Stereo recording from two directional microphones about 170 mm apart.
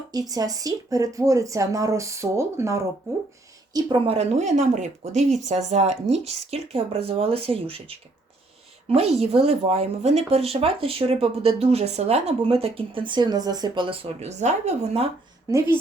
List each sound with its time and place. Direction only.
0.1 s speech: 20° right (ahead or behind); by 15.1 s 40° right (ahead or behind)
15.4 s speech: 15° right (ahead or behind)